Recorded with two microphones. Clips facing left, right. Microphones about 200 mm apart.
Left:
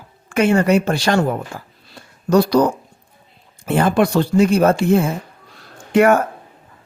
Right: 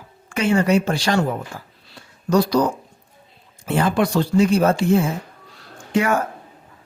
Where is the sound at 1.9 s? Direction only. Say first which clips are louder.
Left 3 dB; 60° left (ahead or behind).